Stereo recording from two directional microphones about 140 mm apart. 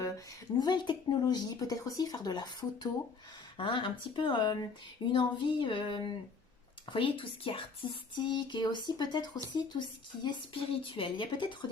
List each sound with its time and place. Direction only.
0.6 s speech: 30° left (ahead or behind)